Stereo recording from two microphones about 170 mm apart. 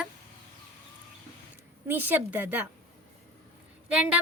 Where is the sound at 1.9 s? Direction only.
10° right (ahead or behind).